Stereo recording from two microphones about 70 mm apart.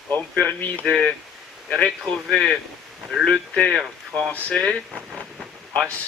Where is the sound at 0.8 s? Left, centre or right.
Centre.